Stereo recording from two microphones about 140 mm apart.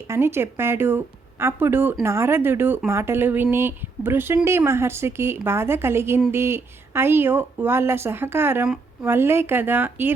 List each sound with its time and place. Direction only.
0.1 s speech: 15° right (ahead or behind)